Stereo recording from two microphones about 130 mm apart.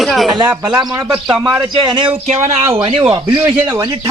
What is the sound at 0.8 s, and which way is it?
A man's voice, 30° right (ahead or behind).